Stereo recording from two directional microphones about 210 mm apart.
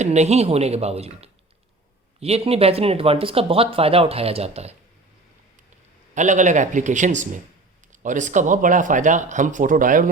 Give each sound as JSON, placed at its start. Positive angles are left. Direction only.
{"t": 0.0, "sound": "speech", "side_deg": -30}
{"t": 6.1, "sound": "speech", "side_deg": -35}